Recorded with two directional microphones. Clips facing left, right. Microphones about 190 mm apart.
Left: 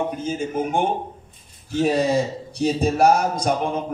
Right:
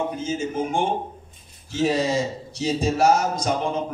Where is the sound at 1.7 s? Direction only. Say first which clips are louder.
Left 2 dB; 60° left (ahead or behind).